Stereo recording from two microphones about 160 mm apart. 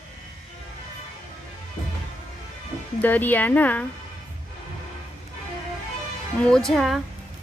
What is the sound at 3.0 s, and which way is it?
Speech, 10° left (ahead or behind).